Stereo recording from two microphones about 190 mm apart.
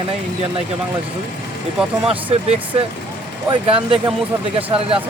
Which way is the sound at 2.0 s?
30° right (ahead or behind).